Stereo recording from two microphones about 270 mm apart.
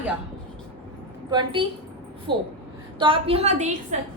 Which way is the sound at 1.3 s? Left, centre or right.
Centre.